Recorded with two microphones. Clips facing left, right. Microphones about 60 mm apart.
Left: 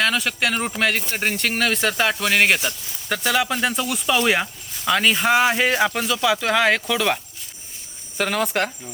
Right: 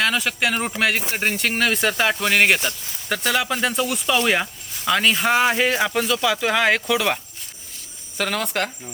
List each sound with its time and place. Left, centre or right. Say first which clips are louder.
0.0 s speech: even; centre
8.2 s speech: left 2 dB; centre